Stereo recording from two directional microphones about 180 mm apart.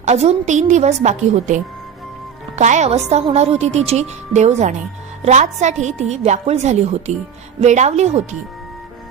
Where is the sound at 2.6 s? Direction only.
40° right (ahead or behind).